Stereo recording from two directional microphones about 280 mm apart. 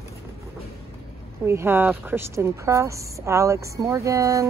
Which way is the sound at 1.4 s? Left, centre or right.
Centre.